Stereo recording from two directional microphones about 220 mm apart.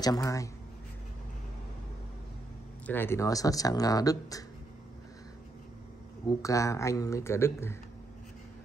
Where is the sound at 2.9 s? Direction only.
10° left (ahead or behind).